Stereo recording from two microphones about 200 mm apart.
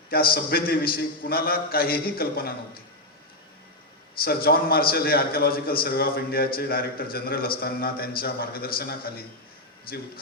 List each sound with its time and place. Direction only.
0.1 s a man's voice: 50° left (ahead or behind)
4.2 s a man's voice: 50° left (ahead or behind)